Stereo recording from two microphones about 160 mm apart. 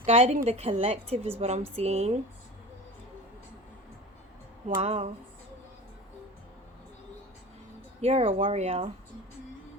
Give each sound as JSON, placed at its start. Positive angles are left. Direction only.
{"t": 0.0, "sound": "speech", "side_deg": -40}
{"t": 4.8, "sound": "speech", "side_deg": -40}
{"t": 8.0, "sound": "speech", "side_deg": -40}